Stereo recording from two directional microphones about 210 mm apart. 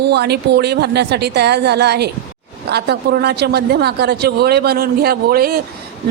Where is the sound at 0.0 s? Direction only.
50° right (ahead or behind).